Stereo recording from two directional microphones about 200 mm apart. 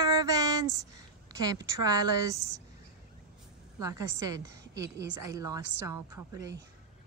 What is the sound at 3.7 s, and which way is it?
A woman's voice, 15° right (ahead or behind).